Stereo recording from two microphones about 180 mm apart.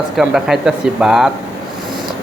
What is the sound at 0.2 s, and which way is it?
Speech, centre (ahead or behind).